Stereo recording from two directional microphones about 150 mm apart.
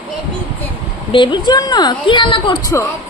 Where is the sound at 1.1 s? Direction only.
30° left (ahead or behind).